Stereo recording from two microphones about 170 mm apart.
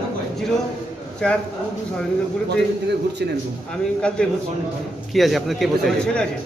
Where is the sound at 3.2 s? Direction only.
75° right (ahead or behind).